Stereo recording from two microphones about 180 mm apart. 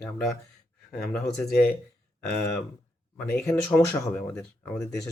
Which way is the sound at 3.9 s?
20° left (ahead or behind).